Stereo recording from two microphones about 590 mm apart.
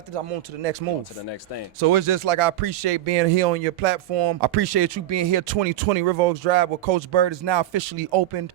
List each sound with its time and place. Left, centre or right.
0.6 s speech: right
1.8 s speech: right
7.1 s speech: right